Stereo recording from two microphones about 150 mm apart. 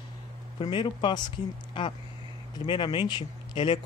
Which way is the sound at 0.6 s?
35° left (ahead or behind).